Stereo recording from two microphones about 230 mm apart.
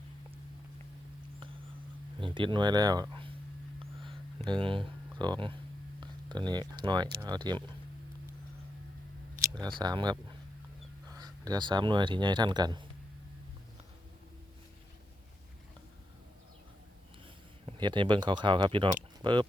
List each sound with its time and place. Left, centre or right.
2.2 s speech: right
4.4 s speech: right
6.0 s a sound: centre
7.2 s speech: centre
9.6 s speech: centre
17.7 s speech: centre